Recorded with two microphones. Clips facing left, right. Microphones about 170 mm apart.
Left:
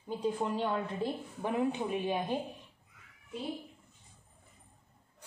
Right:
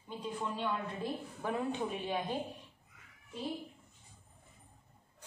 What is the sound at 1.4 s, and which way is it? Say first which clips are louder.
Speech: left 4 dB; 15° left (ahead or behind).